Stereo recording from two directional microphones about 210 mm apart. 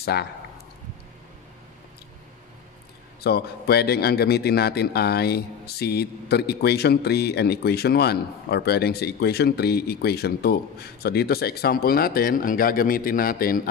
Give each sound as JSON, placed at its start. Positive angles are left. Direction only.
{"t": 0.0, "sound": "speech", "side_deg": 50}
{"t": 3.3, "sound": "a man's voice", "side_deg": 50}